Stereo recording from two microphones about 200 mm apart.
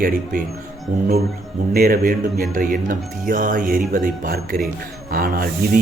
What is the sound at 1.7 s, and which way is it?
Speech, 45° right (ahead or behind).